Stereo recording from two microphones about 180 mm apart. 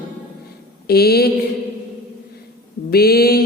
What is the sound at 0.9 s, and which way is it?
Mantra, 60° left (ahead or behind).